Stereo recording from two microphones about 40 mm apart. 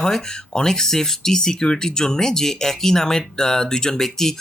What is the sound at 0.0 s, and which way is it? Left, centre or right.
Speech, centre.